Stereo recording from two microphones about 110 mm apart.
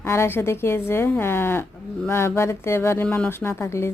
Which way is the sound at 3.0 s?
10° left (ahead or behind).